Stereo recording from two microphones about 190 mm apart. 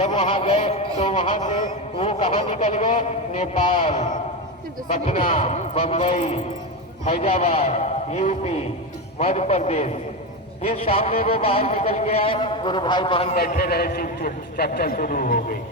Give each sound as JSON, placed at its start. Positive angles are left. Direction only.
{"t": 0.0, "sound": "music", "side_deg": 30}
{"t": 4.9, "sound": "a man's voice", "side_deg": 30}
{"t": 11.3, "sound": "music", "side_deg": 30}
{"t": 13.6, "sound": "a man's voice", "side_deg": 55}